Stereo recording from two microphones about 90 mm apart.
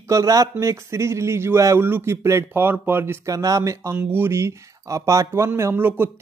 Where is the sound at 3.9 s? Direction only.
20° right (ahead or behind).